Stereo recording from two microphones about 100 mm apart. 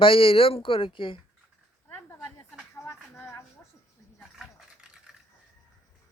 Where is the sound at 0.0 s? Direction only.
65° left (ahead or behind).